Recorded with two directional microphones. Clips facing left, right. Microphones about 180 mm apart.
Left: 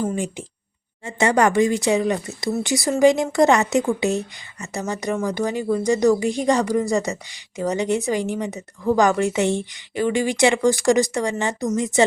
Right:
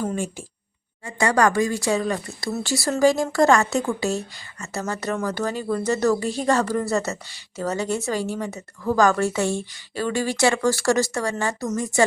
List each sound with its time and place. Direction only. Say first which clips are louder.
0.0 s speech: left 2 dB; 15° left (ahead or behind)